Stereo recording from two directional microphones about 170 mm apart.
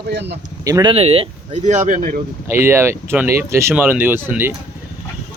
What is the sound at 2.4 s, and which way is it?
Speech, 15° right (ahead or behind).